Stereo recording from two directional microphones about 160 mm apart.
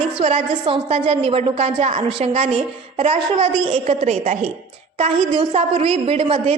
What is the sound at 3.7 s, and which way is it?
A woman's voice, 45° right (ahead or behind).